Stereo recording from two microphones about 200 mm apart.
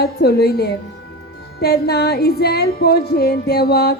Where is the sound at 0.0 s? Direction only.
50° left (ahead or behind).